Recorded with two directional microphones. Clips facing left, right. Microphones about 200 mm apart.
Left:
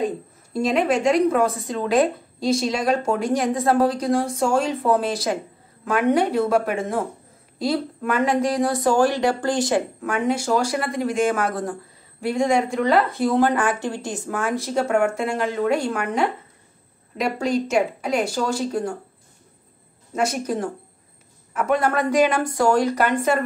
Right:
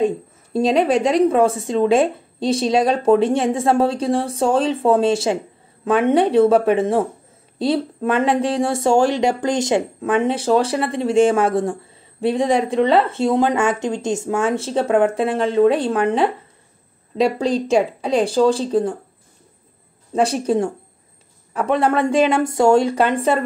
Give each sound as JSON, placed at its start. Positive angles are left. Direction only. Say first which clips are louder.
{"t": 0.0, "sound": "a woman's voice", "louder": "right 5 dB", "side_deg": -30}
{"t": 20.1, "sound": "a woman's voice", "louder": "right 5 dB", "side_deg": -30}